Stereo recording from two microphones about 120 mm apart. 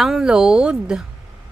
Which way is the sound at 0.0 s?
5° right (ahead or behind).